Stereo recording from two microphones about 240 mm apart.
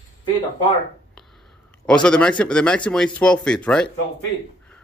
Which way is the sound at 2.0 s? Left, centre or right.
Centre.